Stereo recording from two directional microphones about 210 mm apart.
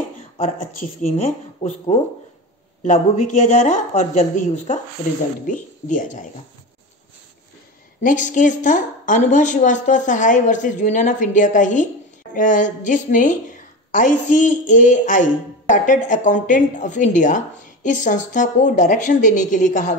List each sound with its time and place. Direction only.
0.7 s a woman's voice: 30° left (ahead or behind)
8.0 s a woman's voice: 35° left (ahead or behind)